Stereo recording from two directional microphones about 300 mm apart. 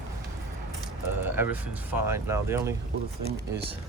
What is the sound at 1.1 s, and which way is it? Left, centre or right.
Speech, centre.